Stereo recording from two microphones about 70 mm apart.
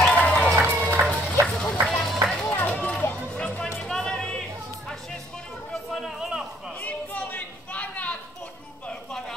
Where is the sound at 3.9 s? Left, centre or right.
Centre.